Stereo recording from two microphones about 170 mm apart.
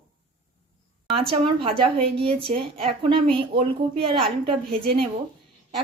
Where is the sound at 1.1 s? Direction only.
30° right (ahead or behind).